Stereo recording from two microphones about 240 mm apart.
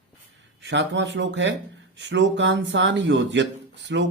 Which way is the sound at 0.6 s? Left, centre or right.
Right.